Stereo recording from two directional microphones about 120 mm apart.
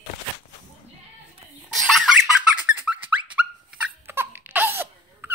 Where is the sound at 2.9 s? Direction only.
5° right (ahead or behind).